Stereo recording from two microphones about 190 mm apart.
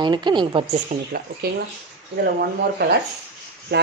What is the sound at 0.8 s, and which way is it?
Speech, 55° right (ahead or behind).